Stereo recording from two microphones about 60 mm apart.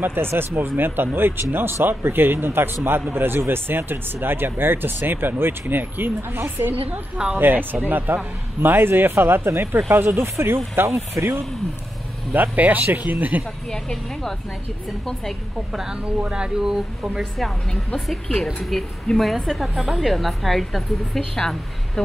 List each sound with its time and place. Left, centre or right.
0.0 s a man's voice: right
6.9 s speech: centre
7.3 s a man's voice: right
10.8 s speech: right
12.3 s speech: right
13.7 s speech: centre
15.7 s speech: centre
17.2 s speech: centre